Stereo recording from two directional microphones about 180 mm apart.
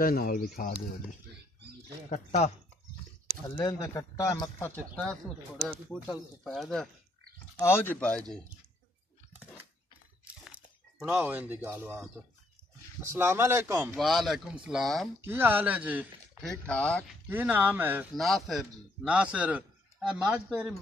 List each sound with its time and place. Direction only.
0.0 s speech: 55° left (ahead or behind)
2.0 s speech: 40° left (ahead or behind)
3.4 s speech: 20° left (ahead or behind); by 6.9 s centre (ahead or behind)
7.6 s speech: 10° left (ahead or behind)
10.2 s crunch: 5° right (ahead or behind)
13.0 s a man's voice: 15° right (ahead or behind)
13.9 s speech: centre (ahead or behind)
15.2 s a man's voice: 10° right (ahead or behind)
16.4 s speech: 5° left (ahead or behind)
17.3 s a man's voice: 10° right (ahead or behind)
18.1 s a man's voice: centre (ahead or behind)